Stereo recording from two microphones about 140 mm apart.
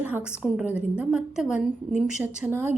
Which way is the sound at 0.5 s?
10° right (ahead or behind).